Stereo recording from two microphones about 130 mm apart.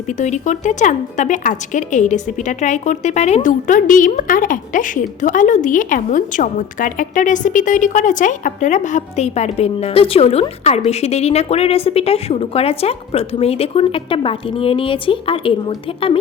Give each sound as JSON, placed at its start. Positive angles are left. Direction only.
{"t": 0.2, "sound": "a woman's voice", "side_deg": 65}